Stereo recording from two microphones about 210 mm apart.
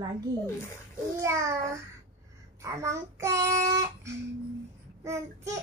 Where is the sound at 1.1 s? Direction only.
15° right (ahead or behind).